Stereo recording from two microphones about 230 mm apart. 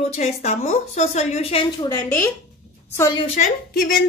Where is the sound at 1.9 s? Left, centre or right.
Centre.